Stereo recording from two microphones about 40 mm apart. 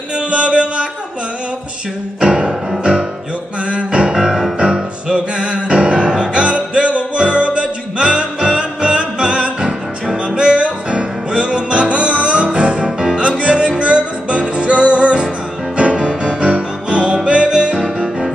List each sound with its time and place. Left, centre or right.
0.3 s music: right
2.1 s music: centre
9.6 s music: centre
13.4 s music: right